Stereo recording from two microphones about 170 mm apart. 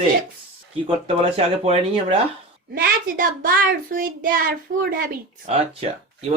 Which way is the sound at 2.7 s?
60° right (ahead or behind).